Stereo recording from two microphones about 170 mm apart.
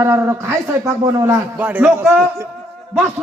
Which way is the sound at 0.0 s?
15° right (ahead or behind).